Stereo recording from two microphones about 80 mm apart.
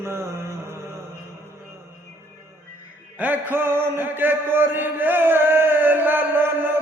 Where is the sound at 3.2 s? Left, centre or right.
Right.